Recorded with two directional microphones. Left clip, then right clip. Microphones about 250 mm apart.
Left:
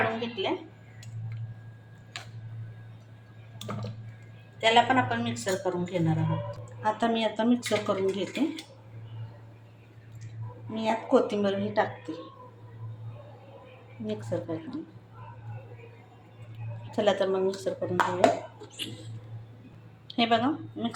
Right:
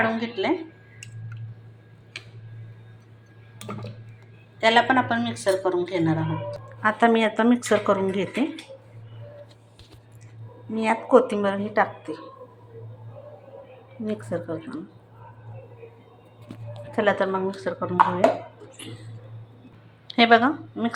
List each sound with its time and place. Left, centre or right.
0.2 s speech: centre
4.6 s a woman's voice: centre
10.8 s a woman's voice: centre
14.0 s a woman's voice: centre
16.9 s speech: centre
20.1 s a woman's voice: centre